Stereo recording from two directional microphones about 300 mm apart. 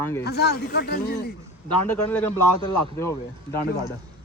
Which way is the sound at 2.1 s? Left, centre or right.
Centre.